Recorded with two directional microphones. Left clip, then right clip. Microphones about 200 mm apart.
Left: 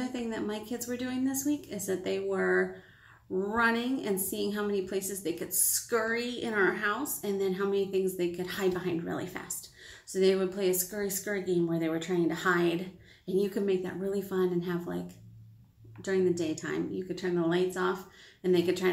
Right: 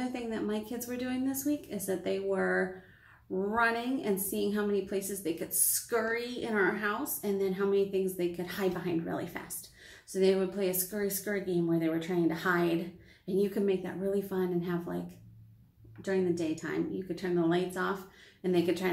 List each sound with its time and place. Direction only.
0.1 s a woman's voice: 15° left (ahead or behind)
16.0 s a woman's voice: 15° left (ahead or behind)